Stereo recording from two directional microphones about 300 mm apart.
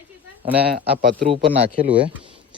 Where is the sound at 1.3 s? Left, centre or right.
Centre.